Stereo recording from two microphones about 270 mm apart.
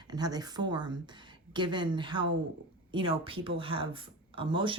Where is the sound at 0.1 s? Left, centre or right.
Centre.